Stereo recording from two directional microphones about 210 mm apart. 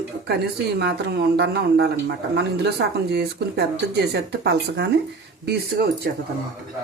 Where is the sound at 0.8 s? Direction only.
50° right (ahead or behind).